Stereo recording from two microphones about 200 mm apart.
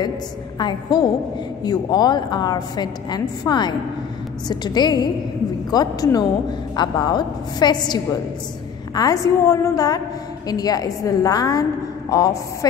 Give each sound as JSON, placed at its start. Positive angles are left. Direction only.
{"t": 0.6, "sound": "a woman's voice", "side_deg": 20}